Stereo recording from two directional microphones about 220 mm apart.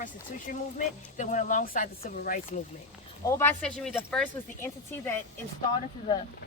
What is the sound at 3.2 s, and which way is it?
Speech, 10° left (ahead or behind).